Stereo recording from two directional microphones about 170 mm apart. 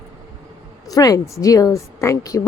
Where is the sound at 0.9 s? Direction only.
20° left (ahead or behind).